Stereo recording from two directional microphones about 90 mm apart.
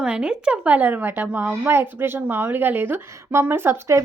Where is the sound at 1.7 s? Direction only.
25° right (ahead or behind).